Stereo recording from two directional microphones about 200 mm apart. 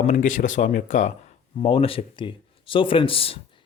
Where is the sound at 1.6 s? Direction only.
25° left (ahead or behind).